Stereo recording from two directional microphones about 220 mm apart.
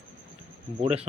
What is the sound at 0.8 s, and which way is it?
Speech, 25° right (ahead or behind).